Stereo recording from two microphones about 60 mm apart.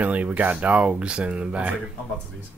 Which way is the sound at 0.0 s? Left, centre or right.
Right.